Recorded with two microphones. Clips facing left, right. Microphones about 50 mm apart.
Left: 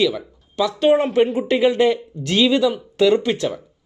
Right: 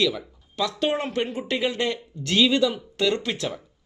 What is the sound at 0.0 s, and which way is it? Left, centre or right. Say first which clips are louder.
Speech: left 5 dB; centre.